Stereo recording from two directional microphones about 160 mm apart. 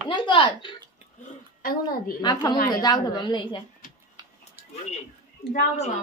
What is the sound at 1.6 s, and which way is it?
Speech, 65° left (ahead or behind).